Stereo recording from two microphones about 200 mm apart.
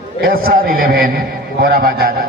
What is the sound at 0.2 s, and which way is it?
A man's voice, 45° right (ahead or behind).